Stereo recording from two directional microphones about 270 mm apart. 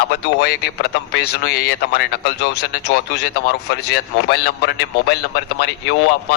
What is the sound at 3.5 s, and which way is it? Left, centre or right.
A man's voice, left.